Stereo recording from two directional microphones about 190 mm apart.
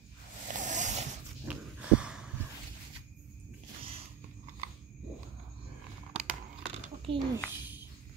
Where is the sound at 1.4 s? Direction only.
5° right (ahead or behind).